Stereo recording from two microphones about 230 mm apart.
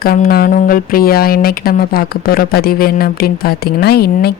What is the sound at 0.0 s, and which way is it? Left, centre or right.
Speech, left.